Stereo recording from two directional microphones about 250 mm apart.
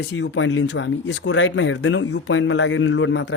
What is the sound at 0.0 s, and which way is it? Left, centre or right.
Speech, left.